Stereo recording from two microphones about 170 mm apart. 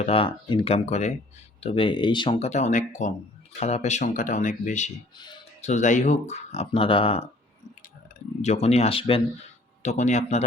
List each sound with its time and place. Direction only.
0.0 s speech: 30° left (ahead or behind)
5.1 s speech: 25° left (ahead or behind)
5.6 s speech: 45° left (ahead or behind)
8.4 s speech: 40° left (ahead or behind)
9.8 s speech: 45° left (ahead or behind)